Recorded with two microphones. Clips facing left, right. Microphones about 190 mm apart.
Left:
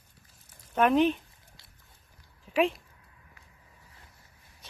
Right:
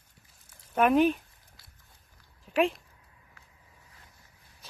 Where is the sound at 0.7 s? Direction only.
5° right (ahead or behind).